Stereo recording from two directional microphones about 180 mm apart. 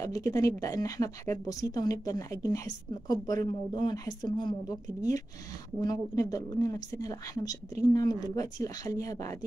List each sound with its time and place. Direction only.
0.0 s speech: 20° left (ahead or behind)
5.8 s speech: 20° left (ahead or behind)